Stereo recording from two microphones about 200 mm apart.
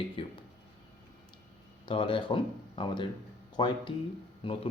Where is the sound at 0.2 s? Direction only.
25° left (ahead or behind).